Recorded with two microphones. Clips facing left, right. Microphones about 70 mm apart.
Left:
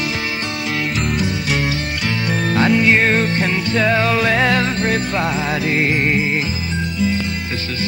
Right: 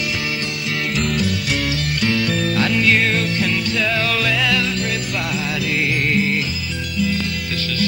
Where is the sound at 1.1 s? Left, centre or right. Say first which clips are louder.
Left 1 dB; left.